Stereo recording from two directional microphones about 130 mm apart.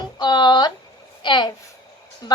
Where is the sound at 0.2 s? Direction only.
35° left (ahead or behind).